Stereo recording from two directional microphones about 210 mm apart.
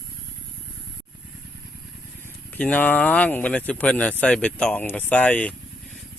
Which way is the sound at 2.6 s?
5° left (ahead or behind).